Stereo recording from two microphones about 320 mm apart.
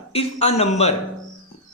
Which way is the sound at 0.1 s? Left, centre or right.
Centre.